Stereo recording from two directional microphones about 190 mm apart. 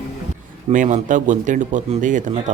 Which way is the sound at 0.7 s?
40° right (ahead or behind).